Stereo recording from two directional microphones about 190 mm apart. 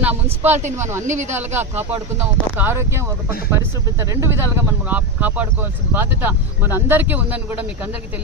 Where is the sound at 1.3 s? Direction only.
10° right (ahead or behind).